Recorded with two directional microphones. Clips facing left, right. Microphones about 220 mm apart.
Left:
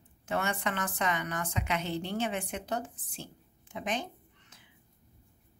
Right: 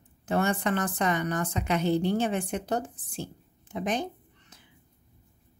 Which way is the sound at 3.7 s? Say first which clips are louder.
Right 5 dB; 40° right (ahead or behind).